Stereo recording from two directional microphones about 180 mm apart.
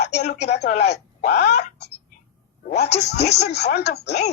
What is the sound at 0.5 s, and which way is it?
Speech, 65° left (ahead or behind).